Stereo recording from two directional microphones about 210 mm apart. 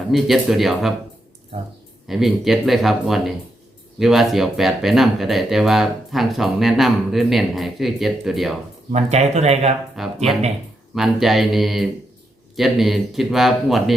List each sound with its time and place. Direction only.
0.1 s speech: centre (ahead or behind)
2.0 s speech: centre (ahead or behind)
8.9 s speech: 30° right (ahead or behind)
10.0 s speech: centre (ahead or behind)